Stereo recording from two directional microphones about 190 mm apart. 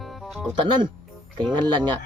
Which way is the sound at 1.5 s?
25° right (ahead or behind).